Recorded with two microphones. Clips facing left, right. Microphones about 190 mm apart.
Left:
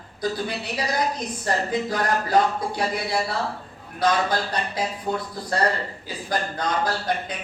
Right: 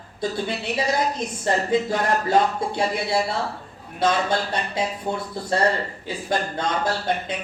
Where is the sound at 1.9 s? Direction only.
25° right (ahead or behind).